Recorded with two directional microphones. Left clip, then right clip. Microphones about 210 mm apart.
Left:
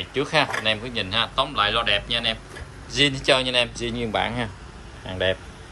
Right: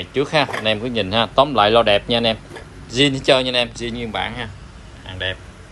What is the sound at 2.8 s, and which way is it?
A man's voice, 5° left (ahead or behind).